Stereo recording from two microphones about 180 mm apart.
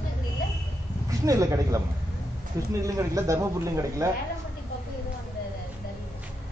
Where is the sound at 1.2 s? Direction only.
15° right (ahead or behind).